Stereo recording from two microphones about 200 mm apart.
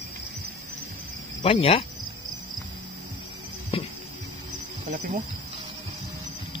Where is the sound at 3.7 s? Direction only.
30° left (ahead or behind).